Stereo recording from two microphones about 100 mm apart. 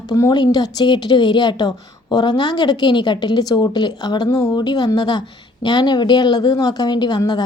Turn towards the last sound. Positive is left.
turn(degrees=45)  # may be behind; listen again after turning